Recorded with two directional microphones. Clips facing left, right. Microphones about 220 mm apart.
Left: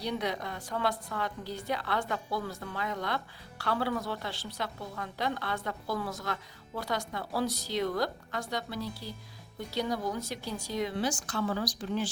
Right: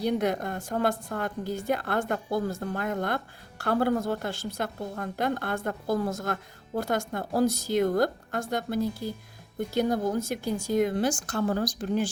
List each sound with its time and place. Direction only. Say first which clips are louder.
0.0 s a woman's voice: right 7 dB; 50° right (ahead or behind)